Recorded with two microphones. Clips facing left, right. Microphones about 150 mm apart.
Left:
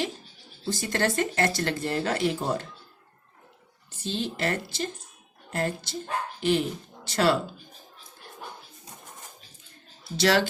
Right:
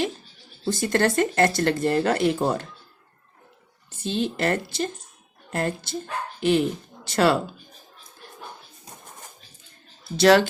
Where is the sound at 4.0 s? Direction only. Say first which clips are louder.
Right 5 dB; 55° right (ahead or behind).